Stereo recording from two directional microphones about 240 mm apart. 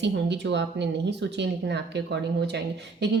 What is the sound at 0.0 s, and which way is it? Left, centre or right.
A woman's voice, right.